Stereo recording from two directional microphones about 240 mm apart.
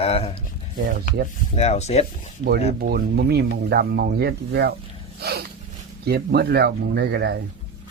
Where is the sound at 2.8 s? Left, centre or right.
Right.